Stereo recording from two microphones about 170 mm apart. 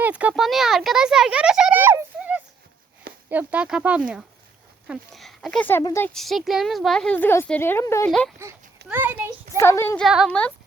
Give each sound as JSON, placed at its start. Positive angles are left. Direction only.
{"t": 0.0, "sound": "a sound", "side_deg": -10}
{"t": 3.2, "sound": "a woman's voice", "side_deg": -10}
{"t": 6.1, "sound": "a woman's voice", "side_deg": 0}
{"t": 8.4, "sound": "a child's voice", "side_deg": -15}
{"t": 9.6, "sound": "a woman's voice", "side_deg": 15}
{"t": 10.1, "sound": "speech", "side_deg": -5}